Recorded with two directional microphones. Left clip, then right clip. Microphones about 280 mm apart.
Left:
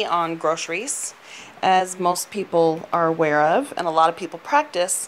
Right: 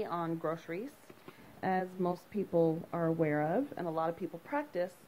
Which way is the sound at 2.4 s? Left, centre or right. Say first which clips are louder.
Left 12 dB; left.